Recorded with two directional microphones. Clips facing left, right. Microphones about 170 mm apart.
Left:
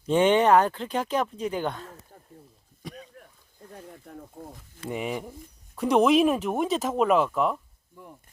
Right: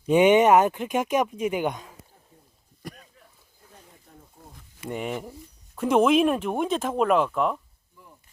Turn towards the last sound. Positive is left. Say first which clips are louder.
# even
turn(degrees=0)  # may be behind; listen again after turning